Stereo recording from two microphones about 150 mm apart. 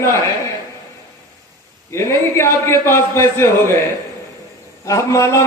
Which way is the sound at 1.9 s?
15° left (ahead or behind).